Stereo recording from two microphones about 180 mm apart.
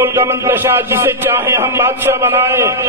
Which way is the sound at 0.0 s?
10° right (ahead or behind).